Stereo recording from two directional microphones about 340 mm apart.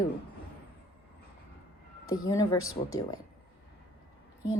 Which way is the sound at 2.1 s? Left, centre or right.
Centre.